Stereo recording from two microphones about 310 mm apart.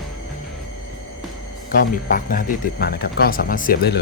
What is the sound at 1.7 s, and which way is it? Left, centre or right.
Speech, left.